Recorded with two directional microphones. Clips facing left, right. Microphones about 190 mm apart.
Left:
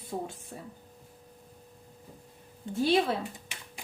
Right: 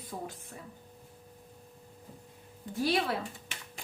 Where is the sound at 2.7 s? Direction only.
25° left (ahead or behind).